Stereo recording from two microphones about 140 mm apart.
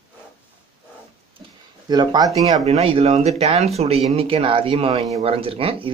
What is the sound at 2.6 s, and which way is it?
Speech, 45° right (ahead or behind).